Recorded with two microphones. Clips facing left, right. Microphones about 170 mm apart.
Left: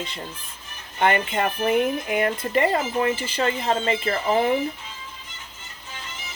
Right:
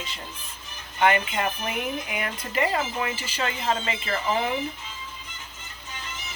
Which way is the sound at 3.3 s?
35° left (ahead or behind).